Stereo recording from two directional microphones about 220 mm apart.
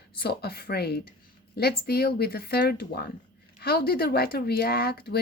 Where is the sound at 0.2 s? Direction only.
45° left (ahead or behind).